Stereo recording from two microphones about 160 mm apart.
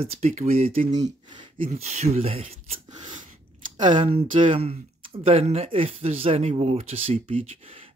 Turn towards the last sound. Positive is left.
turn(degrees=-40)  # may be behind; listen again after turning